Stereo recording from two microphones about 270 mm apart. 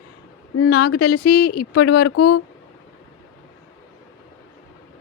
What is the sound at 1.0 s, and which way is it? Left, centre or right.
A woman's voice, left.